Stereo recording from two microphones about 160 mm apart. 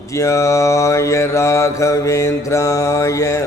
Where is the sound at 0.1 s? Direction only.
20° left (ahead or behind).